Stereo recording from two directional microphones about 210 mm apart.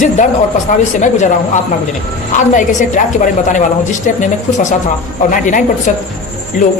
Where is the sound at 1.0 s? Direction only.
35° left (ahead or behind).